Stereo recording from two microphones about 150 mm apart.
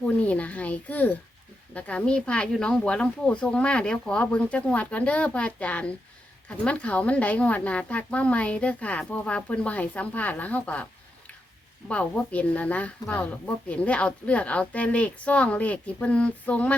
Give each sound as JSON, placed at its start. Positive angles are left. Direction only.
{"t": 0.0, "sound": "a woman's voice", "side_deg": 10}
{"t": 11.9, "sound": "a woman's voice", "side_deg": 10}